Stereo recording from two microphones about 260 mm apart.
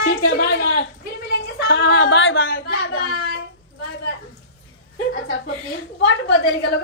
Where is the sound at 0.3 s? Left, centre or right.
Left.